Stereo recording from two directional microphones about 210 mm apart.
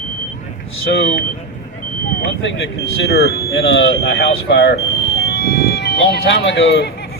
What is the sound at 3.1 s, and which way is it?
Speech, 55° left (ahead or behind).